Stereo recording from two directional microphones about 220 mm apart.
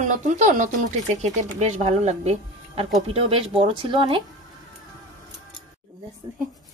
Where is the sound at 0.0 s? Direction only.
35° right (ahead or behind).